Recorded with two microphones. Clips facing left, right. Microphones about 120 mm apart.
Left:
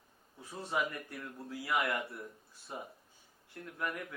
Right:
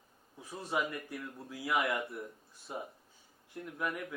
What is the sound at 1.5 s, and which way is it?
A man's voice, 15° right (ahead or behind).